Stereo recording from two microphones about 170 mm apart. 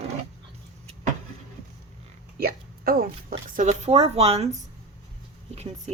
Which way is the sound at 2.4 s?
60° right (ahead or behind).